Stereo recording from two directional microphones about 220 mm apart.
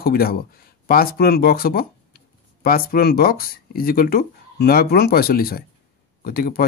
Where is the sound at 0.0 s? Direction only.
45° left (ahead or behind).